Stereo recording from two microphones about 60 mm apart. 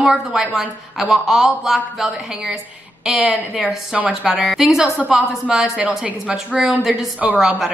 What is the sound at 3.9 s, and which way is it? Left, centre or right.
Speech, centre.